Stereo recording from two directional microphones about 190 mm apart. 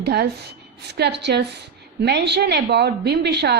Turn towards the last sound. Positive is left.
turn(degrees=-60)  # may be behind; listen again after turning